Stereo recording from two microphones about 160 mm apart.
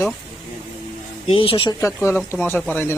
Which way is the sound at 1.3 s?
35° left (ahead or behind).